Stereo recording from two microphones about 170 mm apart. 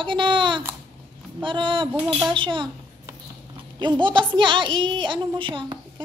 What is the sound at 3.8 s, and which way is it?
Speech, 25° right (ahead or behind).